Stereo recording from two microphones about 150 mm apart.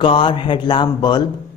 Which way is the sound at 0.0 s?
35° left (ahead or behind).